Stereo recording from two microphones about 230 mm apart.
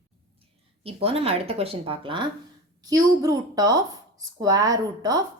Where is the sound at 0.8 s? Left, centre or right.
Right.